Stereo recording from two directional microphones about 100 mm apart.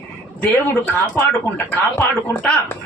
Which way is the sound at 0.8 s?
20° left (ahead or behind).